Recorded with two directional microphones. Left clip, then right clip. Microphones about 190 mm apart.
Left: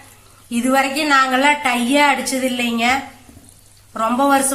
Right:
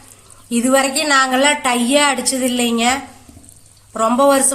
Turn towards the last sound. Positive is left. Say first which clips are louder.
# right 3 dB
turn(degrees=-60)  # may be behind; listen again after turning